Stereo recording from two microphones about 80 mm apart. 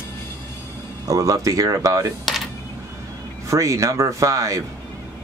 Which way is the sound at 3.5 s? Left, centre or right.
Right.